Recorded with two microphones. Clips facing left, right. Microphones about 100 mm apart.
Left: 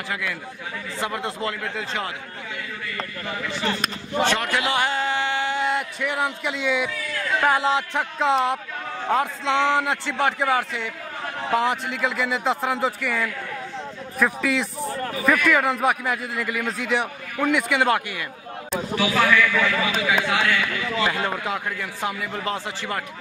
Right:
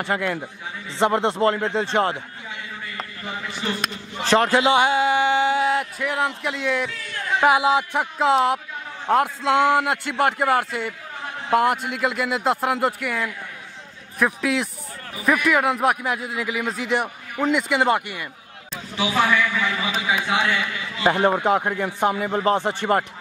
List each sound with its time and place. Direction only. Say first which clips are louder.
0.1 s a man's voice: right 5 dB; 45° right (ahead or behind)
1.6 s a man's voice: right 6 dB; 25° right (ahead or behind)
3.3 s a man's voice: left 1 dB; 20° right (ahead or behind)
4.3 s a man's voice: right 6 dB; 30° right (ahead or behind); by 5.7 s 15° right (ahead or behind)
5.7 s speech: right 2 dB; centre (ahead or behind)
7.2 s a sound: right 1 dB; 25° right (ahead or behind)
7.4 s a man's voice: right 4 dB; 10° right (ahead or behind)
17.4 s a man's voice: right 1 dB; 20° right (ahead or behind)
18.7 s a sound: left 9 dB; 65° left (ahead or behind)
18.9 s a man's voice: even; 20° right (ahead or behind)
21.5 s a man's voice: right 7 dB; 45° right (ahead or behind)
22.1 s a man's voice: right 7 dB; 35° right (ahead or behind)
22.6 s speech: right 7 dB; 55° right (ahead or behind)